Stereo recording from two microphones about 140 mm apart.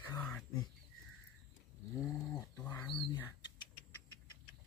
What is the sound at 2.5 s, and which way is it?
Speech, 15° left (ahead or behind).